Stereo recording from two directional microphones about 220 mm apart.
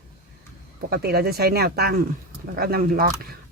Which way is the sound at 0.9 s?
45° right (ahead or behind).